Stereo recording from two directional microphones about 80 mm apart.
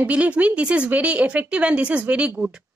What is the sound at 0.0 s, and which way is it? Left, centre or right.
A woman's voice, centre.